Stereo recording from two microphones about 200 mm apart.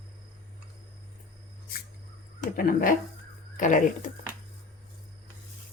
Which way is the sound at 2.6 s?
45° left (ahead or behind).